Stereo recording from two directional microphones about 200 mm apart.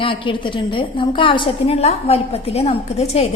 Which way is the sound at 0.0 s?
25° left (ahead or behind).